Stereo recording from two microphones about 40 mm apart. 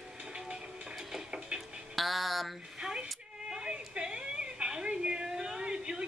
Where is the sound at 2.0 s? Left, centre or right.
Centre.